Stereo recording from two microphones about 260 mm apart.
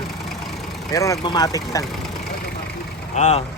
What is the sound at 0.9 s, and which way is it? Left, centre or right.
Speech, centre.